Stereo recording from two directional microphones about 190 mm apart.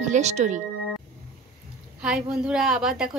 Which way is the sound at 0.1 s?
35° right (ahead or behind).